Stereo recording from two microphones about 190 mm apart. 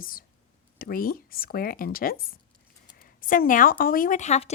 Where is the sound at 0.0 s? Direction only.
50° left (ahead or behind).